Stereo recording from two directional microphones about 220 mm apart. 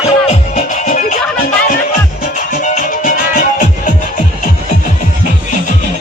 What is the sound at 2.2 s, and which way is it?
Music, 35° left (ahead or behind).